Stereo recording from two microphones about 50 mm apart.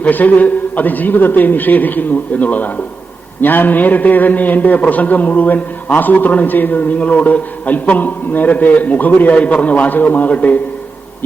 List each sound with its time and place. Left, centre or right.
0.0 s a man's voice: left
9.3 s a man's voice: left